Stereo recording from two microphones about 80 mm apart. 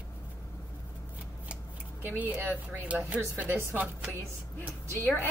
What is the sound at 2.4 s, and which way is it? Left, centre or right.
Speech, centre.